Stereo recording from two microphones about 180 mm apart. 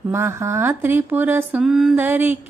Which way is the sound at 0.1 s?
15° right (ahead or behind).